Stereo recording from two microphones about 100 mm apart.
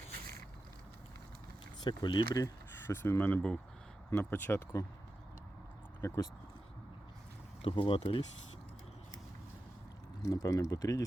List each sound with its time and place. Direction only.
1.8 s speech: 50° left (ahead or behind)
2.4 s speech: 25° left (ahead or behind)
6.0 s speech: 30° left (ahead or behind)
7.6 s speech: 60° left (ahead or behind)
10.2 s speech: 35° left (ahead or behind)